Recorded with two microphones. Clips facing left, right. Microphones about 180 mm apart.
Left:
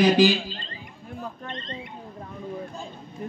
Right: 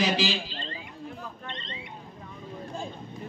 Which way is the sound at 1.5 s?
45° left (ahead or behind).